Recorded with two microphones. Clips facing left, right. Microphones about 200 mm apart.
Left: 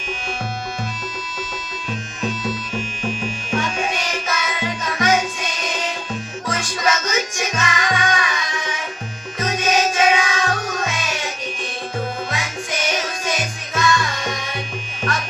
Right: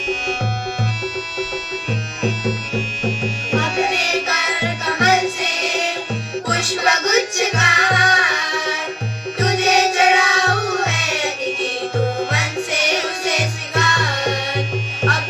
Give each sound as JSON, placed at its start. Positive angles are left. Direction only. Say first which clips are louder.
{"t": 1.9, "sound": "music", "louder": "right 3 dB", "side_deg": -70}